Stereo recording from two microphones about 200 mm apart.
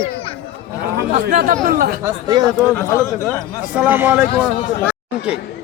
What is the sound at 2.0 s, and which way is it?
Speech, 20° right (ahead or behind).